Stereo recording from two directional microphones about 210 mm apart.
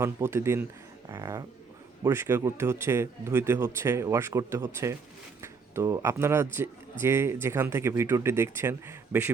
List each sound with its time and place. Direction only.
0.0 s speech: 15° right (ahead or behind)